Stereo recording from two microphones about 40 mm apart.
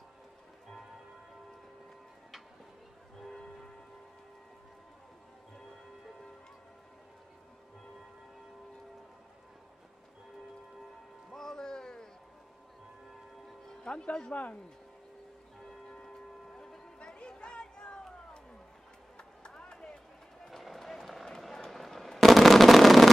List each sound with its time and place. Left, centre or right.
11.3 s music: centre
13.8 s speech: left
14.3 s speech: left
15.9 s a sound: centre
17.0 s a sound: left
19.1 s run: left
20.4 s run: centre
21.4 s machine gun: centre